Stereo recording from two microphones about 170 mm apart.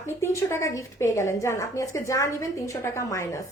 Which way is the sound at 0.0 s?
15° left (ahead or behind).